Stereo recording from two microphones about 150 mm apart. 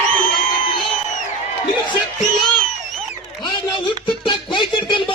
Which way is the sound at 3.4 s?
30° left (ahead or behind).